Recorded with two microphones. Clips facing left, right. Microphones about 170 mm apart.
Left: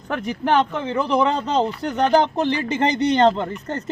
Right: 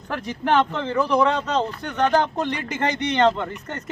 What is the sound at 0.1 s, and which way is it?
Speech, 20° left (ahead or behind).